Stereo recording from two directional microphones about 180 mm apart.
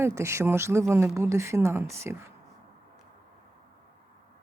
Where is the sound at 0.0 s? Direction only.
15° right (ahead or behind).